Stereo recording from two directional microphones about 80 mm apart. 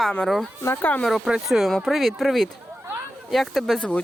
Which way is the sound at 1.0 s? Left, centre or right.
Centre.